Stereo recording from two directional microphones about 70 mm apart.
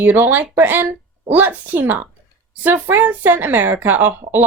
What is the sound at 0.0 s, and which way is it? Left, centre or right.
A woman's voice, right.